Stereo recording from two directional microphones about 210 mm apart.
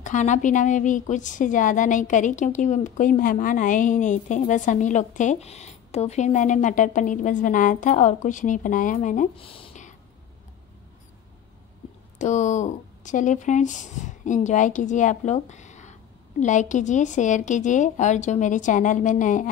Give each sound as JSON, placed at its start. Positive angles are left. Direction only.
{"t": 0.0, "sound": "a woman's voice", "side_deg": 35}
{"t": 9.4, "sound": "a sound", "side_deg": 25}
{"t": 12.2, "sound": "a woman's voice", "side_deg": 35}